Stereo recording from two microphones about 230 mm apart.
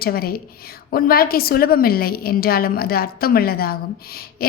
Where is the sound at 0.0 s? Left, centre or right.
Left.